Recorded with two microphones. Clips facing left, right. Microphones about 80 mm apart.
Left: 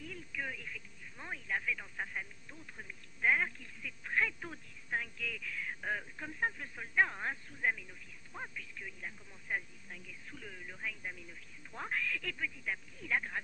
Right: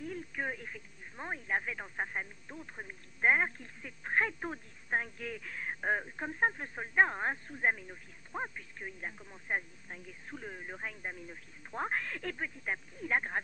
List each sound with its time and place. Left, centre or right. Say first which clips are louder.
0.0 s speech: right 5 dB; right